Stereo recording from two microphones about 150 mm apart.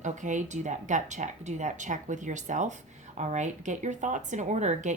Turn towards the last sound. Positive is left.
turn(degrees=-50)  # may be behind; listen again after turning